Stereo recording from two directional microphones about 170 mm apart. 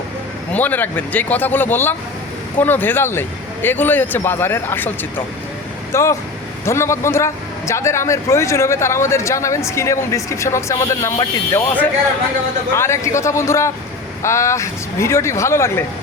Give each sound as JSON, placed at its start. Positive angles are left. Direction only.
{"t": 0.5, "sound": "a man's voice", "side_deg": 10}